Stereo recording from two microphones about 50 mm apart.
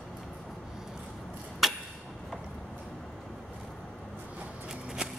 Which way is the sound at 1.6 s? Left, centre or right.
Centre.